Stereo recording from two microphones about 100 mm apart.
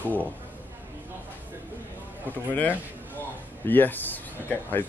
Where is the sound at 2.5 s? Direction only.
20° left (ahead or behind).